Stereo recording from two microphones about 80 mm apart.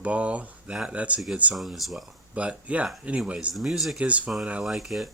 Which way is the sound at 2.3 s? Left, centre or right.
Centre.